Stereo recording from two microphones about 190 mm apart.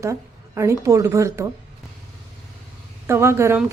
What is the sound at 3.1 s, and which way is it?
Speech, 15° right (ahead or behind).